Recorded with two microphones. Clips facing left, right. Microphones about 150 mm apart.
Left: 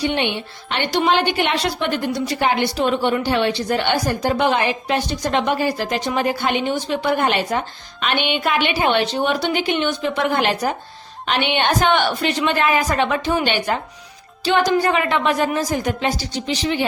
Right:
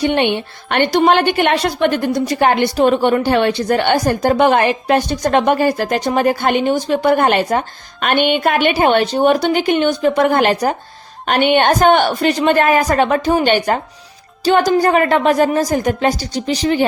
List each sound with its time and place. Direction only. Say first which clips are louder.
0.0 s a woman's voice: right 6 dB; 55° right (ahead or behind)